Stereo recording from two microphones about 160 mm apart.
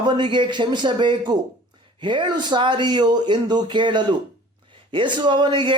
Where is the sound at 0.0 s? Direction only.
30° right (ahead or behind).